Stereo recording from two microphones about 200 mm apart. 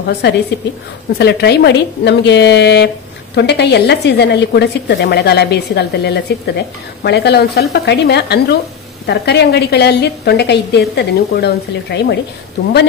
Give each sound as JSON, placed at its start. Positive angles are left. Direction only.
{"t": 0.0, "sound": "a woman's voice", "side_deg": 55}